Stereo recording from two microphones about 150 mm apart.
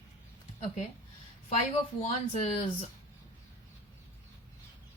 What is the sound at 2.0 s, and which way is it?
Speech, 45° left (ahead or behind).